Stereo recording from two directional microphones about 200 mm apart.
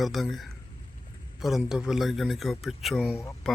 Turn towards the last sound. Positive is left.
turn(degrees=10)  # may be behind; listen again after turning